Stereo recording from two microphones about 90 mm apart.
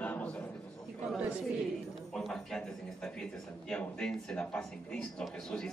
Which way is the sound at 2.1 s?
5° left (ahead or behind).